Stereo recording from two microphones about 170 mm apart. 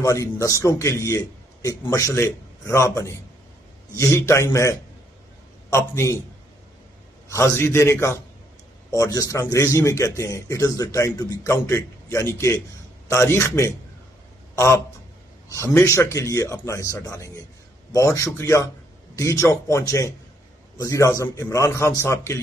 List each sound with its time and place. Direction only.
0.0 s a man's voice: 20° left (ahead or behind)
7.2 s a man's voice: 15° left (ahead or behind)
14.5 s a sound: 15° left (ahead or behind)
15.4 s a man's voice: 15° left (ahead or behind)